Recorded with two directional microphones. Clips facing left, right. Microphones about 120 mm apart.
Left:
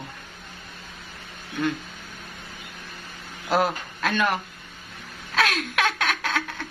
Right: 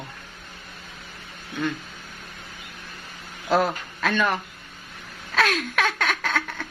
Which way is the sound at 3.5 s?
10° left (ahead or behind).